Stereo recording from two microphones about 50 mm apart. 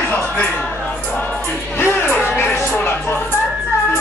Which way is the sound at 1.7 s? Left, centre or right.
Left.